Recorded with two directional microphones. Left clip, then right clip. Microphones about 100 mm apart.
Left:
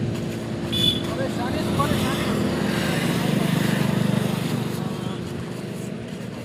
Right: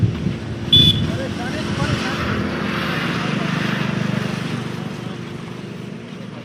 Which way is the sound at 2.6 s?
55° left (ahead or behind).